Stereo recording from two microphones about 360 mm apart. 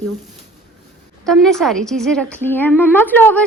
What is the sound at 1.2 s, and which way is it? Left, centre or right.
A woman's voice, centre.